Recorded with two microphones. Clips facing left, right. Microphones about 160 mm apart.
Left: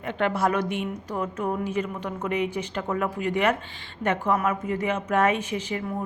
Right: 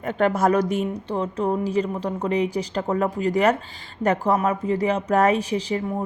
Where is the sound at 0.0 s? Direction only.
40° right (ahead or behind).